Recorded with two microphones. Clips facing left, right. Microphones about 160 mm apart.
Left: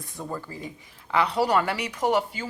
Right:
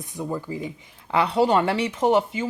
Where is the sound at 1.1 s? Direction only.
25° right (ahead or behind).